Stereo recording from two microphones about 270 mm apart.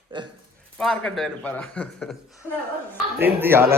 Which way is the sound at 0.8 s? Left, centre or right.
Centre.